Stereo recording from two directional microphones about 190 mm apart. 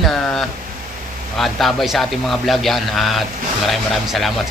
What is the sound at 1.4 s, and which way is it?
A man's voice, centre (ahead or behind).